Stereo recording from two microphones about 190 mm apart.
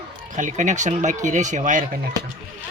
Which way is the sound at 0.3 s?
40° right (ahead or behind).